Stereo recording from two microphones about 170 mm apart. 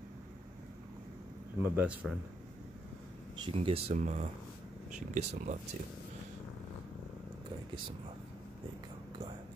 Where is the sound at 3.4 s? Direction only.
35° right (ahead or behind).